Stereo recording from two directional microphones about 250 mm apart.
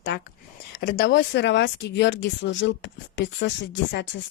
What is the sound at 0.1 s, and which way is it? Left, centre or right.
A woman's voice, left.